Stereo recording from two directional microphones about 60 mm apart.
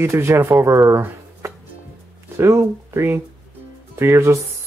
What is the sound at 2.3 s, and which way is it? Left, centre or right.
Speech, right.